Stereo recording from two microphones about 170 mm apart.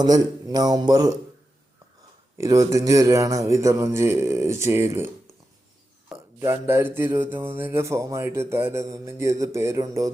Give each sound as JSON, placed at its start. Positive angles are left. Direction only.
{"t": 0.0, "sound": "speech", "side_deg": -25}
{"t": 2.4, "sound": "speech", "side_deg": -20}
{"t": 6.4, "sound": "speech", "side_deg": -15}